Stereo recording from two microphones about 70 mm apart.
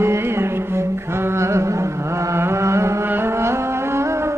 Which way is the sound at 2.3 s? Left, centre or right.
Right.